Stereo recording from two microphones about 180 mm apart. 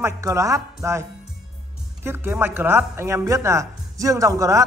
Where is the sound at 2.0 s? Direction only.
10° right (ahead or behind).